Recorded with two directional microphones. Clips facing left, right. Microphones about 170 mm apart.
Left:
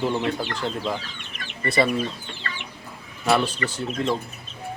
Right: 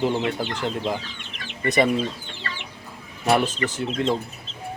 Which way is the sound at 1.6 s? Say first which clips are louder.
Right 2 dB; 20° right (ahead or behind).